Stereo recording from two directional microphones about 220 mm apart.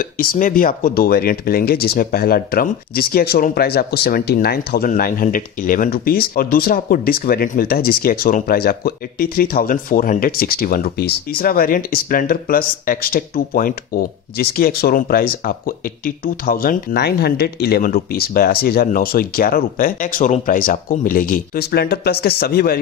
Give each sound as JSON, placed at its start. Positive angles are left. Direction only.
{"t": 0.0, "sound": "speech", "side_deg": 40}